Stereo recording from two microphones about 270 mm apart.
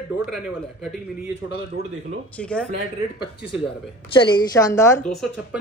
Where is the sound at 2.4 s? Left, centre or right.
Centre.